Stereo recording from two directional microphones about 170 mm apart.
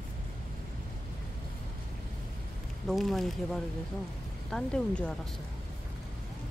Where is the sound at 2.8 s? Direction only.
Centre (ahead or behind).